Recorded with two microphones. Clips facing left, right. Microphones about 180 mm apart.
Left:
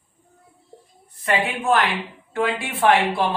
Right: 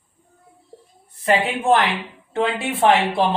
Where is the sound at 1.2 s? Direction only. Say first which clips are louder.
Right 3 dB; 25° right (ahead or behind).